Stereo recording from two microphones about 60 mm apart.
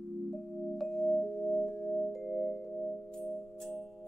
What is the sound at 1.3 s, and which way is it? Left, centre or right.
Music, centre.